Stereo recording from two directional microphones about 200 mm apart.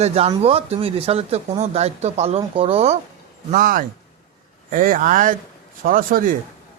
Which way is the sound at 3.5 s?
45° right (ahead or behind).